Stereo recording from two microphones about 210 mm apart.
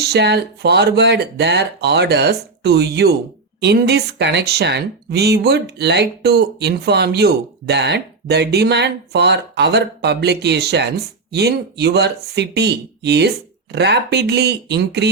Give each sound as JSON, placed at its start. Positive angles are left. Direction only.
{"t": 0.0, "sound": "speech", "side_deg": -50}